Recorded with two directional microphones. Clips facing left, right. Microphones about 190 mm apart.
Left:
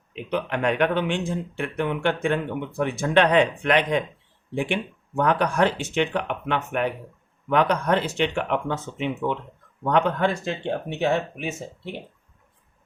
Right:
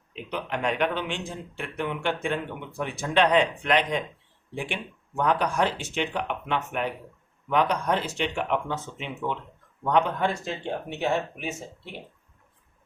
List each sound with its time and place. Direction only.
0.2 s a man's voice: 60° left (ahead or behind)